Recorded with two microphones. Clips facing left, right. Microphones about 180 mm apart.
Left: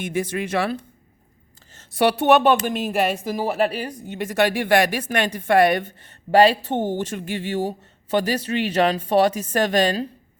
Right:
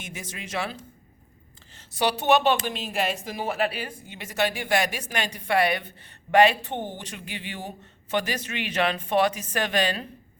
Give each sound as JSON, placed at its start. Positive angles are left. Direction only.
{"t": 0.0, "sound": "speech", "side_deg": 55}
{"t": 6.3, "sound": "speech", "side_deg": 35}